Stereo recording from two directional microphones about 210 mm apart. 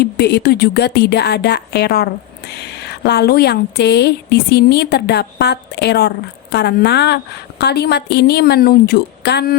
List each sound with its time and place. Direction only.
0.0 s speech: 50° left (ahead or behind)